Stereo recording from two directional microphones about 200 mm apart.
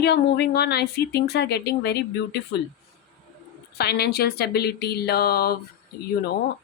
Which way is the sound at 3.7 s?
55° left (ahead or behind).